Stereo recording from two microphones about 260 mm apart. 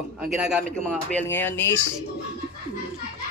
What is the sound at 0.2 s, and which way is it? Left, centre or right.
A man's voice, centre.